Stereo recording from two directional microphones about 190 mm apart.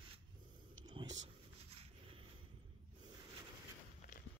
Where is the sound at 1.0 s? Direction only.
30° right (ahead or behind).